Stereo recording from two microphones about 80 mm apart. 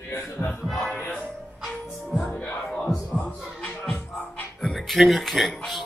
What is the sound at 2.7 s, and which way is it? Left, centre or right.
Heart sounds, centre.